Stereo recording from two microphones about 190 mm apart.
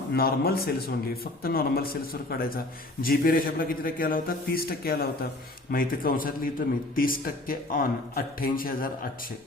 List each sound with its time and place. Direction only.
0.1 s a man's voice: 50° left (ahead or behind)